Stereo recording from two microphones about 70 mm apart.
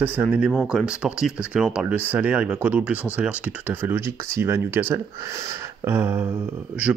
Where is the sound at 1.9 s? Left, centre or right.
Right.